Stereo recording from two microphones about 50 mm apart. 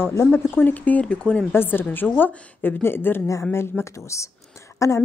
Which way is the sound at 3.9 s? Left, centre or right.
Left.